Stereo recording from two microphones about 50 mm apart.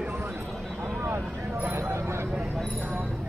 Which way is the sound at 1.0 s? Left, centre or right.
Right.